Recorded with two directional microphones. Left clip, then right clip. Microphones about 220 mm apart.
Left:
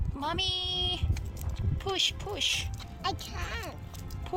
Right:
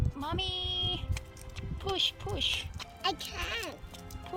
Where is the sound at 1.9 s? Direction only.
30° left (ahead or behind).